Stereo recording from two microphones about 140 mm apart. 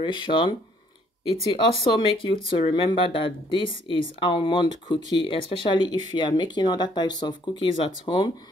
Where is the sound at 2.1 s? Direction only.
40° left (ahead or behind).